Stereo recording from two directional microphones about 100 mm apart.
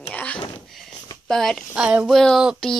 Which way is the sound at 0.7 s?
Centre (ahead or behind).